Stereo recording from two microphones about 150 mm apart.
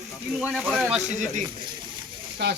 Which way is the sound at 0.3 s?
5° right (ahead or behind).